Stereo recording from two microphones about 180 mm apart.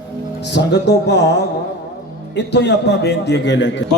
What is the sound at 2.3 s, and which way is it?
A man's voice, 70° left (ahead or behind).